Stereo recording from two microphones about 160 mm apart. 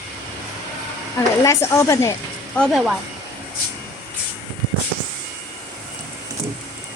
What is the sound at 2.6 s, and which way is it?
Speech, centre (ahead or behind).